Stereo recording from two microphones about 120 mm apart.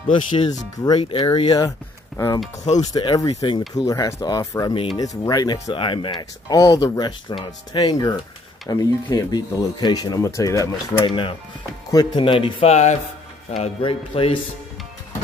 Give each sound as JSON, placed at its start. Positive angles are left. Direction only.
{"t": 0.1, "sound": "speech", "side_deg": 40}
{"t": 2.1, "sound": "speech", "side_deg": 25}
{"t": 2.8, "sound": "speech", "side_deg": 35}
{"t": 6.5, "sound": "speech", "side_deg": 30}
{"t": 11.1, "sound": "speech", "side_deg": 45}
{"t": 12.6, "sound": "speech", "side_deg": 65}
{"t": 13.6, "sound": "speech", "side_deg": 50}